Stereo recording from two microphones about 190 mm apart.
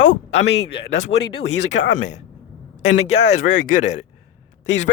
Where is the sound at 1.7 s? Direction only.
75° left (ahead or behind).